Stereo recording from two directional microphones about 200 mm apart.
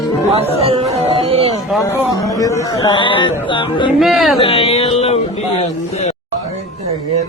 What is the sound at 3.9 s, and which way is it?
Speech, centre (ahead or behind).